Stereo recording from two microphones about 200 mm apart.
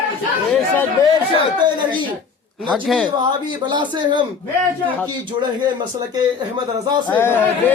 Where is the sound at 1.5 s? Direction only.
20° right (ahead or behind).